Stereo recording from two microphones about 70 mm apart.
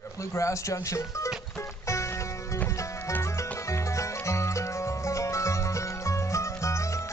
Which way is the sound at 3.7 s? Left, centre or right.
Left.